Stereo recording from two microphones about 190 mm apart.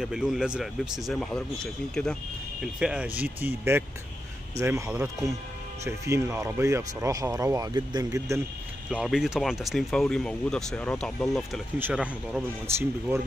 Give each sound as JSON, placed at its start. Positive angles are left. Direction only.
{"t": 0.0, "sound": "speech", "side_deg": 0}
{"t": 8.9, "sound": "speech", "side_deg": -5}